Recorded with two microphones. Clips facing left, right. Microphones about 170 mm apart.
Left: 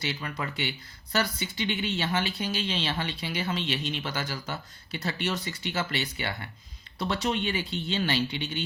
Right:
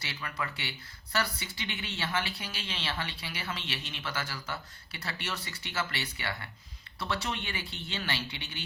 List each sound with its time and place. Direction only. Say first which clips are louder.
0.0 s speech: left 5 dB; 25° left (ahead or behind)